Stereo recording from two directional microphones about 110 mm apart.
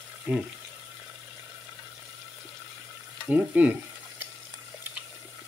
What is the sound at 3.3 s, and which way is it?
Frying, 15° right (ahead or behind).